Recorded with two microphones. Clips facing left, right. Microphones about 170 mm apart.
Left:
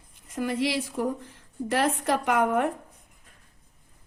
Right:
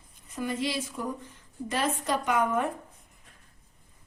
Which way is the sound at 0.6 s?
70° left (ahead or behind).